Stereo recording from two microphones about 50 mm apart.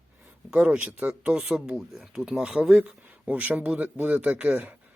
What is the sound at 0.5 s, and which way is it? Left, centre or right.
Speech, right.